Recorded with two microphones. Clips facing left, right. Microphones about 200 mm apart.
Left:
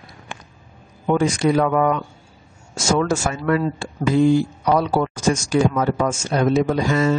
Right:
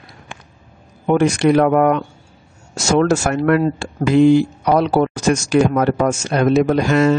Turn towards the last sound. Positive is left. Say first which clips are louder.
# right 4 dB
turn(degrees=-70)  # may be behind; listen again after turning